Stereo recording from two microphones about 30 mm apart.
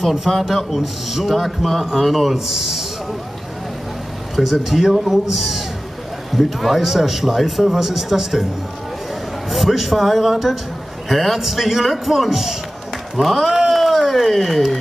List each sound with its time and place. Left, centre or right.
0.0 s a man's voice: centre
1.6 s a man's voice: centre
4.4 s a man's voice: centre
4.9 s a man's voice: centre
5.3 s a man's voice: centre
9.5 s a man's voice: centre
11.1 s a man's voice: centre
13.7 s a sound: centre
14.1 s a man's voice: centre